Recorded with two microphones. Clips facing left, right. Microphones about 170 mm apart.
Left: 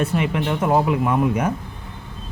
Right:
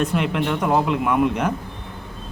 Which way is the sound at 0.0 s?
5° left (ahead or behind).